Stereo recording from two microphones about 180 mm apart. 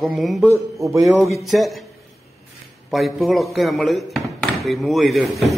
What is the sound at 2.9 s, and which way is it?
A man's voice, centre (ahead or behind).